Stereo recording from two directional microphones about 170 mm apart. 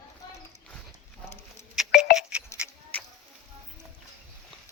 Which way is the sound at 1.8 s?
Centre (ahead or behind).